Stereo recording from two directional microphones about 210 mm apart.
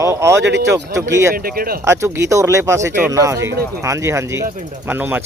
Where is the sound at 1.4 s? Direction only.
45° right (ahead or behind).